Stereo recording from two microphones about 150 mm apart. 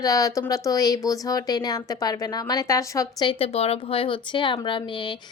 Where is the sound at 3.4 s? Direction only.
40° left (ahead or behind).